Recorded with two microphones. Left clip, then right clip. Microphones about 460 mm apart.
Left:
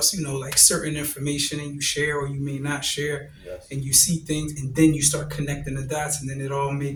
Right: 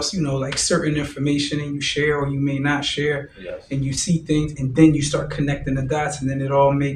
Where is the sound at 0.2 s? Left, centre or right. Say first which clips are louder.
Even; left.